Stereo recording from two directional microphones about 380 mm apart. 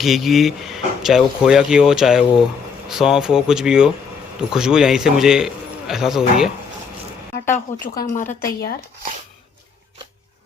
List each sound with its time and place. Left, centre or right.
0.0 s speech: centre
7.4 s a woman's voice: centre